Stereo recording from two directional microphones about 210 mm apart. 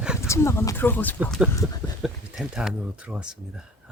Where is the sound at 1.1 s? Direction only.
5° right (ahead or behind).